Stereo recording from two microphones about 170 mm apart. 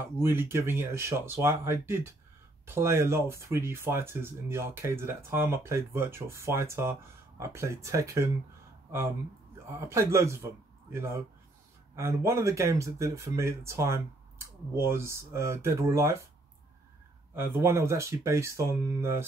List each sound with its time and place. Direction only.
0.2 s speech: 15° right (ahead or behind)
9.7 s a man's voice: 15° right (ahead or behind)
17.3 s speech: 15° right (ahead or behind)